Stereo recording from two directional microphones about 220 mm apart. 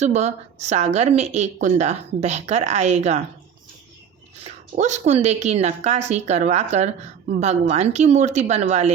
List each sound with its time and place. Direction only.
0.0 s a woman's voice: 30° right (ahead or behind)
4.4 s a woman's voice: 30° right (ahead or behind)